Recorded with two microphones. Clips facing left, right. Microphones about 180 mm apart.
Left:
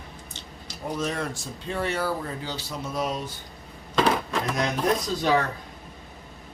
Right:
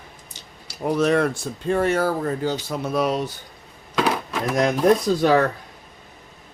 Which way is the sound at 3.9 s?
5° right (ahead or behind).